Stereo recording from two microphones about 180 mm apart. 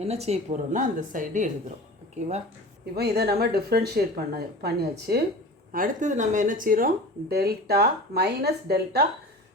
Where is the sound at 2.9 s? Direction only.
60° right (ahead or behind).